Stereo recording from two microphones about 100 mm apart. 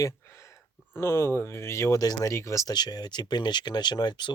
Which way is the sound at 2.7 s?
45° left (ahead or behind).